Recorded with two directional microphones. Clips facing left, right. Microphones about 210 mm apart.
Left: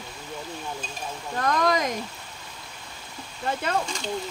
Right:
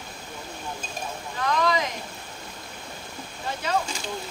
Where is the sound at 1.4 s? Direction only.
50° left (ahead or behind).